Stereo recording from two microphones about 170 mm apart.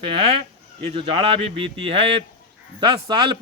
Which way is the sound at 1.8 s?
35° right (ahead or behind).